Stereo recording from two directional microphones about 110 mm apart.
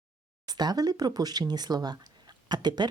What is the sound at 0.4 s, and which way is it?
Speech, 40° right (ahead or behind).